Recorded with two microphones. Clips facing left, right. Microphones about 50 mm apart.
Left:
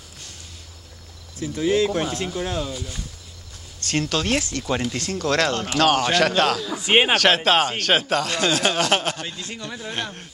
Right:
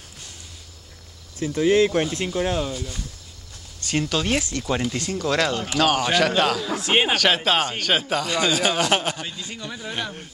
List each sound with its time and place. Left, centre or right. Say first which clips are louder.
1.4 s speech: right 3 dB; right
2.3 s speech: right 3 dB; centre
2.7 s speech: right 1 dB; centre
3.8 s speech: even; centre
6.8 s speech: left 4 dB; centre
7.2 s speech: left 2 dB; centre